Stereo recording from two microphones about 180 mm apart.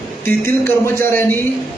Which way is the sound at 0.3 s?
10° left (ahead or behind).